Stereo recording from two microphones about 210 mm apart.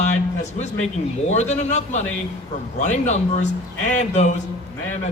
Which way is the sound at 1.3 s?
35° left (ahead or behind).